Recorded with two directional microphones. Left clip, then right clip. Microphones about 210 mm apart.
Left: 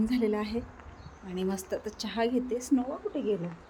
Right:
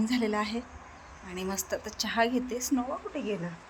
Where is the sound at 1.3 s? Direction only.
15° left (ahead or behind).